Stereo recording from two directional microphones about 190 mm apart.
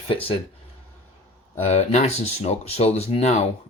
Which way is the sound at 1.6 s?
35° left (ahead or behind).